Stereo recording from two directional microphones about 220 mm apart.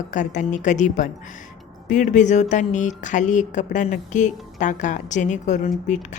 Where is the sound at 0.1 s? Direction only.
35° left (ahead or behind).